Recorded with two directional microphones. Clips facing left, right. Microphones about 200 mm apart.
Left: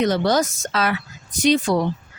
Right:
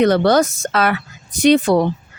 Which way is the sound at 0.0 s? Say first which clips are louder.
Right 5 dB; 60° right (ahead or behind).